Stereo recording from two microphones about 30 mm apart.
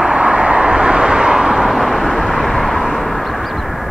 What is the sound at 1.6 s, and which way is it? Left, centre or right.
Vehicle, centre.